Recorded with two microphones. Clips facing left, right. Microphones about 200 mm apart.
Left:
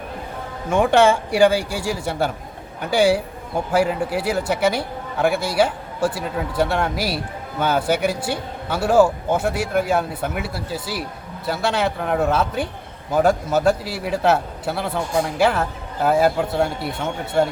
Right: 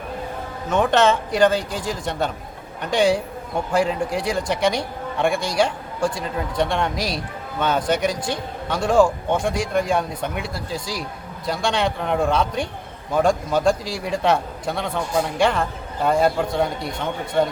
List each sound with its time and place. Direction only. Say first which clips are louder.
0.7 s a man's voice: left 2 dB; 10° left (ahead or behind)